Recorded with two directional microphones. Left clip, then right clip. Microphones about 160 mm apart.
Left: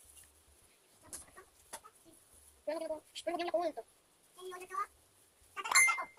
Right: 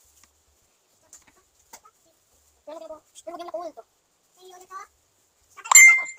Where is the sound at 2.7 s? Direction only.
5° left (ahead or behind).